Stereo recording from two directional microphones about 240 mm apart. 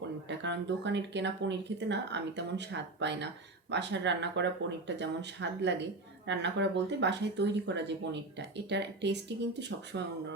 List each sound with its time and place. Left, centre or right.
0.3 s speech: right